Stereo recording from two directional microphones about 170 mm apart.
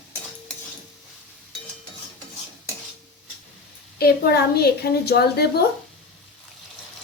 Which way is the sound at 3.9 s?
65° left (ahead or behind).